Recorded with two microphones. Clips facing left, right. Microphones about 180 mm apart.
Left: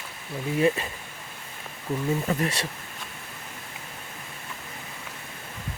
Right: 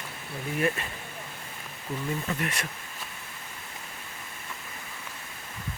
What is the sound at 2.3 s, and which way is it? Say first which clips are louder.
Speech: left 5 dB; 35° left (ahead or behind).